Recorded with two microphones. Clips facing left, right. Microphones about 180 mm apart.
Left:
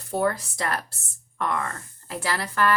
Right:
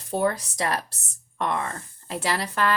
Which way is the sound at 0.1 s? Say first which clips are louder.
Even; 20° right (ahead or behind).